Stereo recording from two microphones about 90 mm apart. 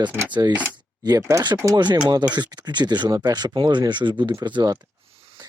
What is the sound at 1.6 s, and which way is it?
Speech, 50° right (ahead or behind).